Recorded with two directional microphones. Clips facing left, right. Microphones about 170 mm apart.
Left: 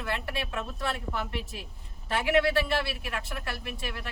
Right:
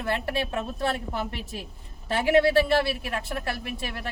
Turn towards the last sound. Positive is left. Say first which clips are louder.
# right 3 dB
turn(degrees=-35)  # may be behind; listen again after turning